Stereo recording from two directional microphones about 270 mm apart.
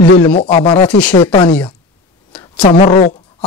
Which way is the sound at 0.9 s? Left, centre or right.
Centre.